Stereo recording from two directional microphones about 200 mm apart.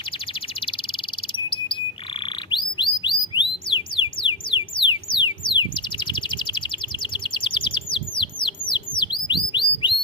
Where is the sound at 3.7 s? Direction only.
25° left (ahead or behind).